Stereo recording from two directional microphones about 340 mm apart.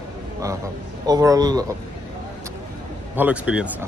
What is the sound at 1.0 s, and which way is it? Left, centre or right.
Speech, centre.